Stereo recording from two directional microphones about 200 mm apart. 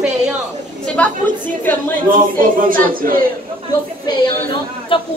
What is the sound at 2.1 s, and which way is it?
Speech, 45° right (ahead or behind).